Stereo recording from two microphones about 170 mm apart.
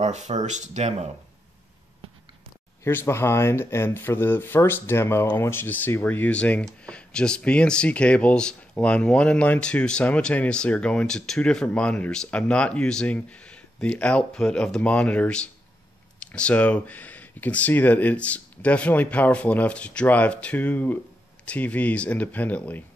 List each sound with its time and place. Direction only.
0.0 s speech: 40° right (ahead or behind)
2.8 s speech: 15° left (ahead or behind)